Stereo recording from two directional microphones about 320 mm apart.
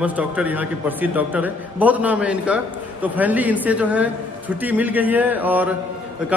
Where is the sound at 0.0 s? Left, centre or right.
Centre.